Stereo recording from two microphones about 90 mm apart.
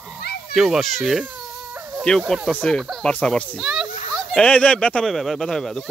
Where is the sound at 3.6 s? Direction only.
5° right (ahead or behind).